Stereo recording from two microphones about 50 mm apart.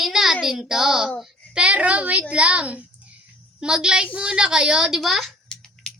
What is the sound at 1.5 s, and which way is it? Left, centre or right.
A child's voice, right.